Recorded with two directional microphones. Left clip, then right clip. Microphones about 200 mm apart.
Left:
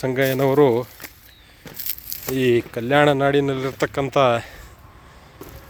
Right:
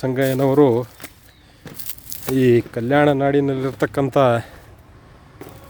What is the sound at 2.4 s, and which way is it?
Speech, 25° right (ahead or behind).